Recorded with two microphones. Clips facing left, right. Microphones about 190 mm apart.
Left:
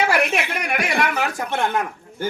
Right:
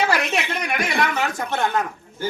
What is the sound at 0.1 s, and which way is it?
A woman's voice, 10° left (ahead or behind).